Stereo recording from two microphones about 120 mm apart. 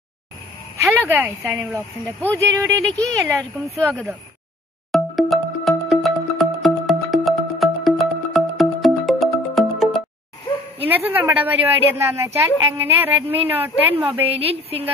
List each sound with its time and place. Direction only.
1.0 s speech: 20° right (ahead or behind)
4.9 s music: centre (ahead or behind)
10.9 s a woman's voice: 15° right (ahead or behind)
14.4 s speech: 55° right (ahead or behind)